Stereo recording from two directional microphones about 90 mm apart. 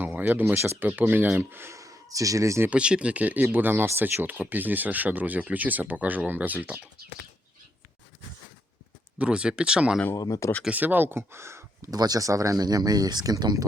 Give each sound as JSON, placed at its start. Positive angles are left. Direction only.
{"t": 0.0, "sound": "speech", "side_deg": -20}
{"t": 2.6, "sound": "speech", "side_deg": -10}
{"t": 9.1, "sound": "speech", "side_deg": -10}
{"t": 10.2, "sound": "speech", "side_deg": 40}
{"t": 10.7, "sound": "speech", "side_deg": -20}
{"t": 11.9, "sound": "speech", "side_deg": -45}